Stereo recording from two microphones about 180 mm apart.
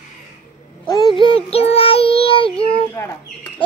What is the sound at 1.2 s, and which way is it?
Child singing, 30° left (ahead or behind).